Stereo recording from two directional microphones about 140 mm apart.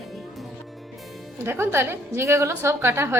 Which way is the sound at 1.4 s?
15° right (ahead or behind).